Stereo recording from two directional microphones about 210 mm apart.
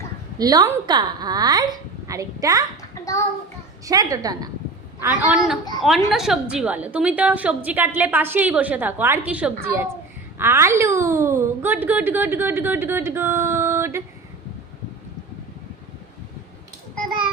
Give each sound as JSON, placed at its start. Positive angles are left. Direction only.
{"t": 0.3, "sound": "a woman's voice", "side_deg": -20}
{"t": 3.0, "sound": "child singing", "side_deg": 15}
{"t": 3.8, "sound": "a woman's voice", "side_deg": -15}
{"t": 5.8, "sound": "a woman's voice", "side_deg": 0}